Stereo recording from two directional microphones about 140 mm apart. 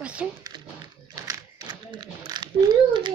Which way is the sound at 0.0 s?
10° right (ahead or behind).